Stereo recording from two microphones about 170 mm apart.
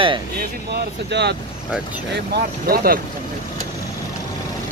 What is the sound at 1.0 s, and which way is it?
Speech, 85° right.